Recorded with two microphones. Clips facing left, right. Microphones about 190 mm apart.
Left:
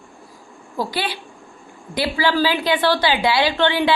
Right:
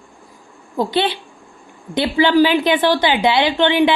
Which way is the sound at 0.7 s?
20° right (ahead or behind).